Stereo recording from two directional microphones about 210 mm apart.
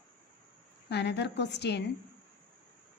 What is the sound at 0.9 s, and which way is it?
Speech, 55° left (ahead or behind).